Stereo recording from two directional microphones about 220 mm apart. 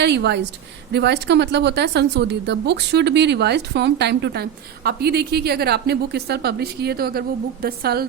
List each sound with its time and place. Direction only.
0.0 s a woman's voice: 50° right (ahead or behind)